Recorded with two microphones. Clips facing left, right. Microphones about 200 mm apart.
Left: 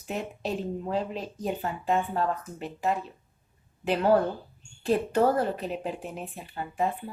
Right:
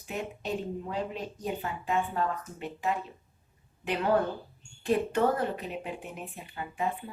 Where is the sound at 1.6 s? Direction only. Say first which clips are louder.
Left 3 dB; 35° left (ahead or behind).